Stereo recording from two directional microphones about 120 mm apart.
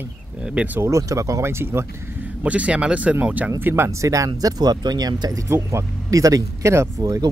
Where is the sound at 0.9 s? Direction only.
25° right (ahead or behind).